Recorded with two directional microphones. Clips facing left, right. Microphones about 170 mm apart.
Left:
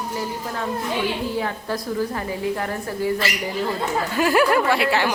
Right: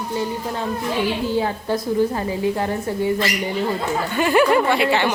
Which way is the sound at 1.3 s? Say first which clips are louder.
Right 4 dB; 25° right (ahead or behind).